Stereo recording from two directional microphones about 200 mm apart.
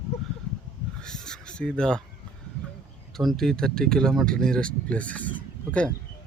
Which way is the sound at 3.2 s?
Centre (ahead or behind).